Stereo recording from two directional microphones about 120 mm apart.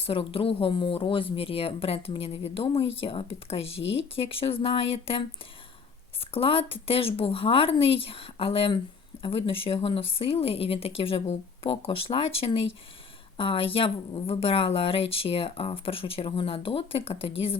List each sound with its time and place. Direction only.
0.0 s speech: 50° left (ahead or behind)